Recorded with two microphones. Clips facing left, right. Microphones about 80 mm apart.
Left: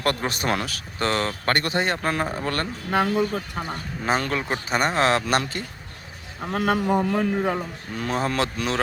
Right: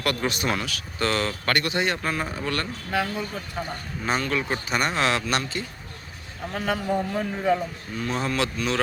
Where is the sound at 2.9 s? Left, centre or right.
Left.